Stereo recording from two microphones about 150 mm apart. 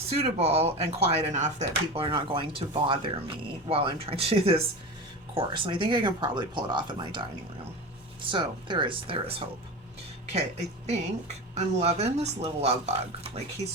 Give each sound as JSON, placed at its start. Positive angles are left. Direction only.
{"t": 0.2, "sound": "speech", "side_deg": -45}
{"t": 1.9, "sound": "speech", "side_deg": -35}